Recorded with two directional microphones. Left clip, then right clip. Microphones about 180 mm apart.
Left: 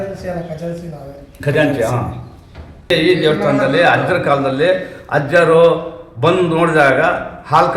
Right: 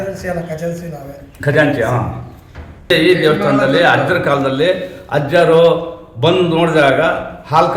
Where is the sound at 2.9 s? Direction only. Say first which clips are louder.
Right 2 dB; 5° right (ahead or behind).